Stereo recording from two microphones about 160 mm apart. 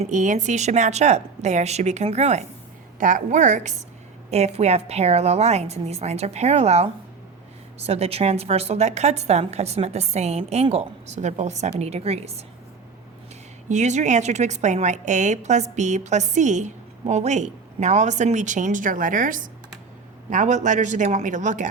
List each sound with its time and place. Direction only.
0.0 s a woman's voice: 50° right (ahead or behind)
13.7 s a woman's voice: 50° right (ahead or behind)